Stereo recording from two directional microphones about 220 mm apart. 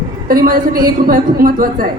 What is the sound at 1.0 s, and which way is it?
Speech, 40° right (ahead or behind).